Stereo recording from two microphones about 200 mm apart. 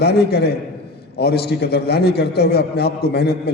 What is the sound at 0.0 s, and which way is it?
A man's voice, 55° left (ahead or behind).